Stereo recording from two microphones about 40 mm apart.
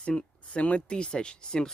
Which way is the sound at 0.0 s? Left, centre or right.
Left.